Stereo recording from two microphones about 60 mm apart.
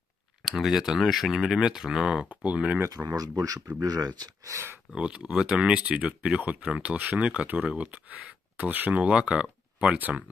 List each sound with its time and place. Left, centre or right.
0.4 s speech: centre
2.2 s speech: right
3.2 s speech: right
4.9 s speech: centre